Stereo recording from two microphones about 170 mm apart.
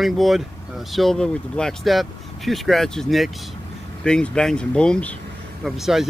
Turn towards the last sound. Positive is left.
turn(degrees=0)  # may be behind; listen again after turning